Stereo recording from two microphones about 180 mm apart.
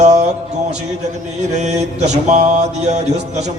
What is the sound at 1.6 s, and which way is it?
Mantra, 40° right (ahead or behind).